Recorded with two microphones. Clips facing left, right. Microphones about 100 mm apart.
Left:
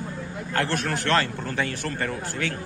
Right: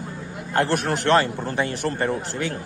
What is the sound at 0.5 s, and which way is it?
A man's voice, 20° right (ahead or behind).